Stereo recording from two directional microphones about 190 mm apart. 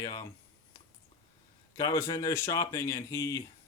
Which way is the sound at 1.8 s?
15° left (ahead or behind).